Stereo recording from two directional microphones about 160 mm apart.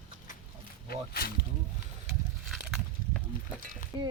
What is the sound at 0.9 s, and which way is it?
Speech, 75° left (ahead or behind).